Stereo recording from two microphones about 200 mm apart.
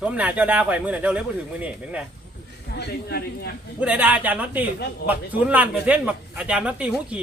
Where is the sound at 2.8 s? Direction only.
55° left (ahead or behind).